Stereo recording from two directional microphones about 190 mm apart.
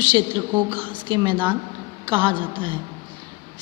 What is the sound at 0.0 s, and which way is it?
A woman's voice, 25° right (ahead or behind).